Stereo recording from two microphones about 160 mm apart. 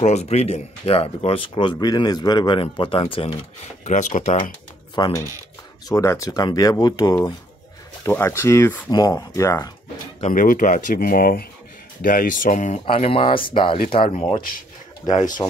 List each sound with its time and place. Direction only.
0.0 s speech: 40° left (ahead or behind)
3.8 s speech: 50° left (ahead or behind)
4.9 s speech: 25° left (ahead or behind)
10.3 s speech: 60° left (ahead or behind)
12.8 s speech: 35° left (ahead or behind)
15.0 s speech: 50° left (ahead or behind)